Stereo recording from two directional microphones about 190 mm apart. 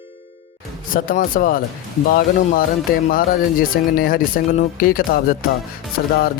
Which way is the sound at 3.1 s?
50° left (ahead or behind).